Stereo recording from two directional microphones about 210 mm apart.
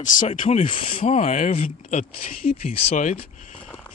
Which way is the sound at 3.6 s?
5° left (ahead or behind).